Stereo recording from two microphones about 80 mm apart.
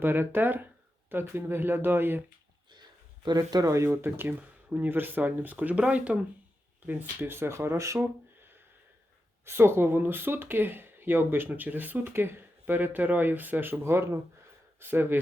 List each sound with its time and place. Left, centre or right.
0.0 s speech: right
3.2 s speech: right
3.8 s speech: right
9.5 s speech: right